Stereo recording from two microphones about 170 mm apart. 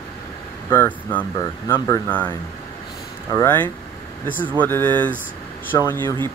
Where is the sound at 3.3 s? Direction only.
15° left (ahead or behind).